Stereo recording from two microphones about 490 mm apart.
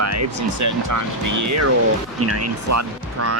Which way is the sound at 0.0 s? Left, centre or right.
Right.